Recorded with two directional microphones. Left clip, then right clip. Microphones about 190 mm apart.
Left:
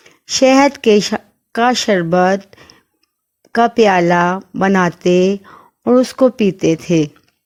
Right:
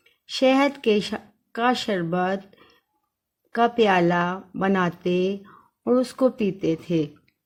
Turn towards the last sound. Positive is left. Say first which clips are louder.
# left 10 dB
turn(degrees=40)  # may be behind; listen again after turning